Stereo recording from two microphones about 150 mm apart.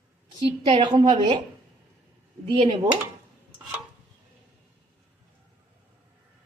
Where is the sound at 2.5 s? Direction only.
30° right (ahead or behind).